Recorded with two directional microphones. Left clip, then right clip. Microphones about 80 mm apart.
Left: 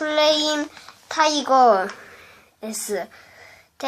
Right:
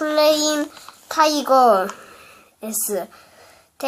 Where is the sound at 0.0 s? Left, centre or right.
Centre.